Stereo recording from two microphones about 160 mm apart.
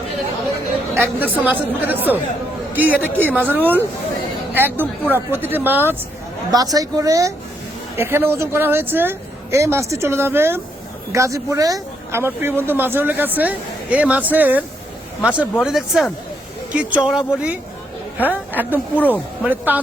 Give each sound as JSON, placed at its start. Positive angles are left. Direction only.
{"t": 0.9, "sound": "speech", "side_deg": -15}
{"t": 6.5, "sound": "a woman's voice", "side_deg": -25}
{"t": 18.9, "sound": "speech", "side_deg": 10}
{"t": 19.5, "sound": "speech", "side_deg": -10}